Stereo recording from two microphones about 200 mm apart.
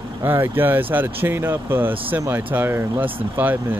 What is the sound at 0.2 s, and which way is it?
Speech, 10° right (ahead or behind).